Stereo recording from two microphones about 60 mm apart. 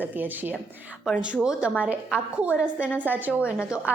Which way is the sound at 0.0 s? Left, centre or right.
Right.